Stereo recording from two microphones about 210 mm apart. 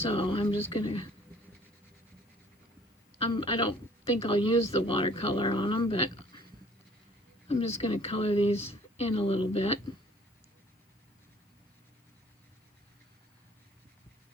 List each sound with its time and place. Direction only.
0.0 s a woman's voice: 25° left (ahead or behind)
3.2 s a woman's voice: 25° left (ahead or behind)
7.4 s a woman's voice: 30° left (ahead or behind)